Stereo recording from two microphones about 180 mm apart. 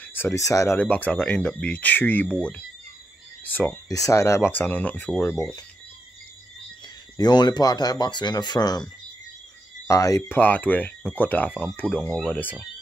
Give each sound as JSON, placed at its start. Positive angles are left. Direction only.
{"t": 0.0, "sound": "speech", "side_deg": 10}
{"t": 3.4, "sound": "speech", "side_deg": 10}
{"t": 7.2, "sound": "speech", "side_deg": 25}